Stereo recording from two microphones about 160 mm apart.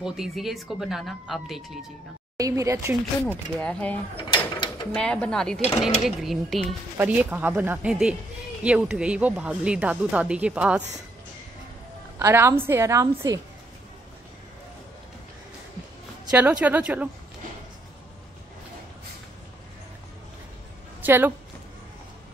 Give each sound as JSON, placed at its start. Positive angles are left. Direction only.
{"t": 0.0, "sound": "speech", "side_deg": 0}
{"t": 2.3, "sound": "speech", "side_deg": -20}
{"t": 3.3, "sound": "speech", "side_deg": 10}
{"t": 4.3, "sound": "mechanisms", "side_deg": 25}
{"t": 4.9, "sound": "speech", "side_deg": 5}
{"t": 7.0, "sound": "speech", "side_deg": -10}
{"t": 12.2, "sound": "speech", "side_deg": -15}
{"t": 16.3, "sound": "speech", "side_deg": -10}
{"t": 21.0, "sound": "a woman's voice", "side_deg": -10}